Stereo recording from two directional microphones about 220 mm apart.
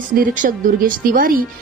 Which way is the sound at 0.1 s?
40° right (ahead or behind).